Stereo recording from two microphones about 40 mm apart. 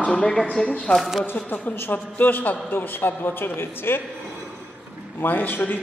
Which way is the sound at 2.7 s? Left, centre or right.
Left.